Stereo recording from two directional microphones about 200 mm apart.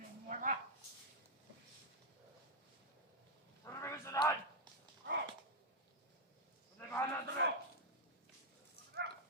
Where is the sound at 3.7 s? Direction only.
15° left (ahead or behind).